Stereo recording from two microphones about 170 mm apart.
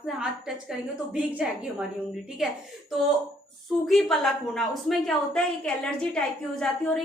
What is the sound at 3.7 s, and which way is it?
A woman's voice, centre (ahead or behind).